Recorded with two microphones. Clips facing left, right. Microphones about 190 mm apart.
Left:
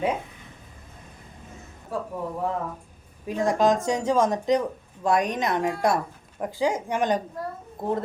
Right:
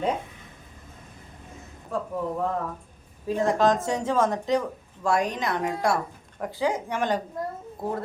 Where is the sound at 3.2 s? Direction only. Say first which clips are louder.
Even; 15° left (ahead or behind).